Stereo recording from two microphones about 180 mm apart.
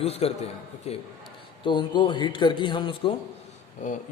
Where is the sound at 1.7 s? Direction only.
25° left (ahead or behind).